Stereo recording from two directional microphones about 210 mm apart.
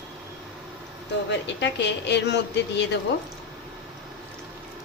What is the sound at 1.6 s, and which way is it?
A woman's voice, 55° left (ahead or behind).